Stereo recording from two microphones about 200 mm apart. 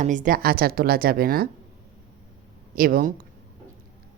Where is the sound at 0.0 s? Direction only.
40° right (ahead or behind).